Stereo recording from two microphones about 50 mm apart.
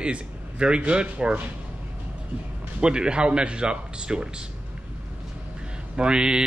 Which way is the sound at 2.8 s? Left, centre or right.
Centre.